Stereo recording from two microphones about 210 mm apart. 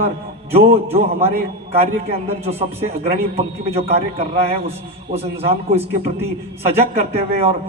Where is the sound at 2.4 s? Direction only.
30° right (ahead or behind).